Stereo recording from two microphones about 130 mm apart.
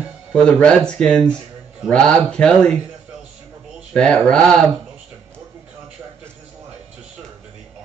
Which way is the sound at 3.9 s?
10° left (ahead or behind).